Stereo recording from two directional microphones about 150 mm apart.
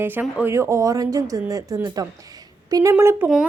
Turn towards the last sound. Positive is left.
turn(degrees=-10)  # may be behind; listen again after turning